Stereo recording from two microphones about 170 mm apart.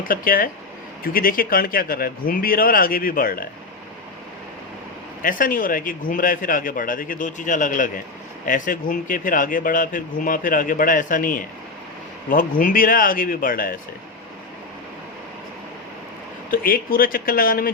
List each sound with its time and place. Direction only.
0.1 s speech: 55° left (ahead or behind)
5.2 s speech: 55° left (ahead or behind)
16.5 s speech: 60° left (ahead or behind)